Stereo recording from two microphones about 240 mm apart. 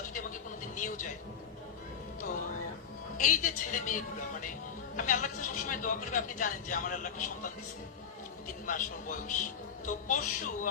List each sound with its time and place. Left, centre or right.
0.1 s a sound: left
3.2 s a man's voice: left
8.6 s a man's voice: left